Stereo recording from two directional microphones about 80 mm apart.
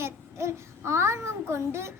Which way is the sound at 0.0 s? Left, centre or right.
Right.